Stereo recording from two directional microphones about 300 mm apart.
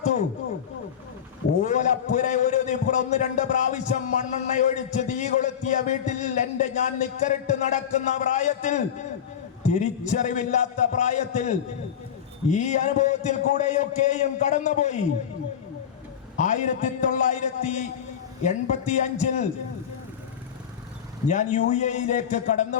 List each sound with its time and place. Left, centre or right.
1.6 s a man's voice: left
16.5 s a man's voice: left
21.2 s a man's voice: left